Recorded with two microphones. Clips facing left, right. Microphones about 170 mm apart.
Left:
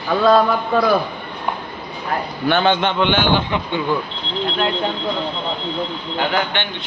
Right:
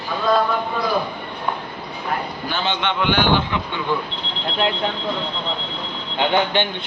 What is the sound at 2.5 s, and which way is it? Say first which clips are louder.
Speech: left 9 dB; 60° left (ahead or behind).